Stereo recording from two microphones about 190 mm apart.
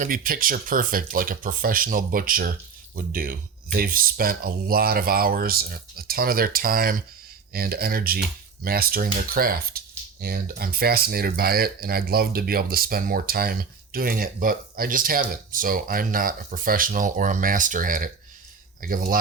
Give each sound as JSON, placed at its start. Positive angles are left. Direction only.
{"t": 0.0, "sound": "speech", "side_deg": -45}